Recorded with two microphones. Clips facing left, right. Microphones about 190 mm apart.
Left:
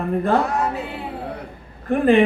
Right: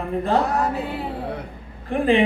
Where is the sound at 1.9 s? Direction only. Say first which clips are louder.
Left 3 dB; 50° left (ahead or behind).